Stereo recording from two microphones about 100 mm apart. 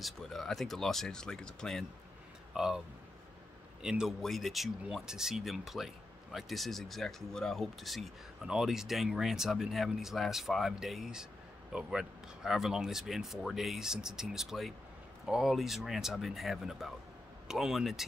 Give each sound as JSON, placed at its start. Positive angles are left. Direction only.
{"t": 0.0, "sound": "speech", "side_deg": 0}
{"t": 2.5, "sound": "speech", "side_deg": -5}
{"t": 3.8, "sound": "a man's voice", "side_deg": -10}